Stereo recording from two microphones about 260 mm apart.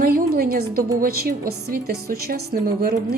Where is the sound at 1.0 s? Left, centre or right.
Right.